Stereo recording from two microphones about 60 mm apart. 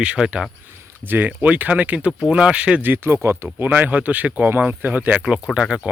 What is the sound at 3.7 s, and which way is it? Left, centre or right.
Speech, right.